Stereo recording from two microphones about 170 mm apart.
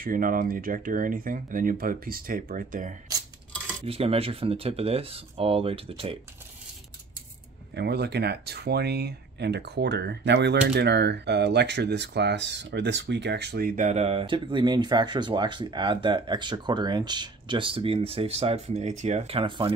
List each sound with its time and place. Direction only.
0.0 s speech: 55° right (ahead or behind)
3.8 s speech: 35° right (ahead or behind)
7.7 s speech: 75° right (ahead or behind); by 19.7 s 30° right (ahead or behind)